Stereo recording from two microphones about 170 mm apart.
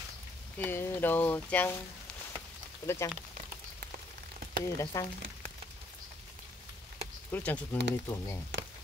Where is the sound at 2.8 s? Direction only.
15° left (ahead or behind).